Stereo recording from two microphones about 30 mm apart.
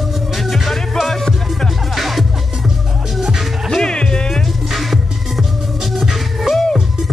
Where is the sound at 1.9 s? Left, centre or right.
Centre.